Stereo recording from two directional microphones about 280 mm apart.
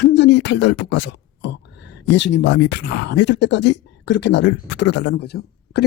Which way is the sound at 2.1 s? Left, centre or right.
Left.